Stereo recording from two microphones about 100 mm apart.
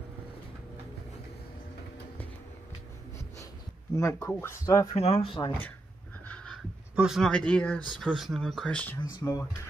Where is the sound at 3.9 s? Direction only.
30° left (ahead or behind).